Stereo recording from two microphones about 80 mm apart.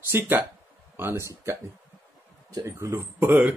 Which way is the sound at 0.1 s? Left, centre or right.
Right.